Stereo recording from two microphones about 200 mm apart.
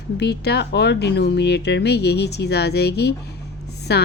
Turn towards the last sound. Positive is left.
turn(degrees=55)  # may be behind; listen again after turning